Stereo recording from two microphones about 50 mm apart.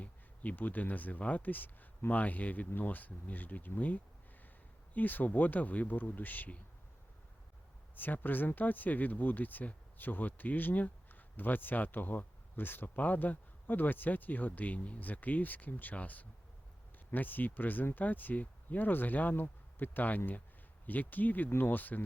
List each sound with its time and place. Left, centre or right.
0.0 s speech: left
7.9 s speech: left